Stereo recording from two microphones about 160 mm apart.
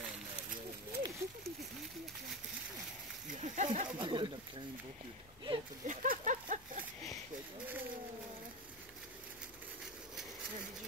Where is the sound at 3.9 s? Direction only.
30° right (ahead or behind).